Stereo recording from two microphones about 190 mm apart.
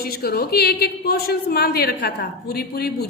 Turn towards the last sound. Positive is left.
turn(degrees=55)  # may be behind; listen again after turning